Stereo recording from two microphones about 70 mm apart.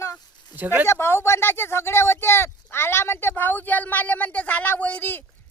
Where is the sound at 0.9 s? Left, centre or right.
Left.